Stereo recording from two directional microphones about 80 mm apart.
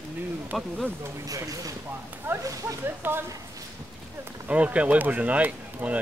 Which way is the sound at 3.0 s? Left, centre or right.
Right.